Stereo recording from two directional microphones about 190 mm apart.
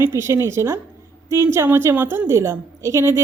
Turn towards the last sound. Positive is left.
turn(degrees=-15)  # may be behind; listen again after turning